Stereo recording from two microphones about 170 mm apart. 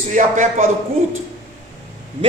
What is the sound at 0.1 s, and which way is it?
Speech, 45° right (ahead or behind).